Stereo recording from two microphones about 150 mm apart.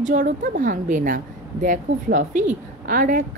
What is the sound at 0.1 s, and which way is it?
Speech, 65° right (ahead or behind).